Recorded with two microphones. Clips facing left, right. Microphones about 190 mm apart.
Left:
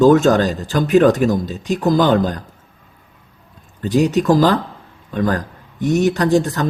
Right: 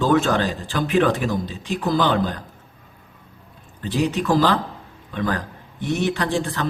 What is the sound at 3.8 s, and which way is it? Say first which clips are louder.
Speech: left 7 dB; 45° left (ahead or behind).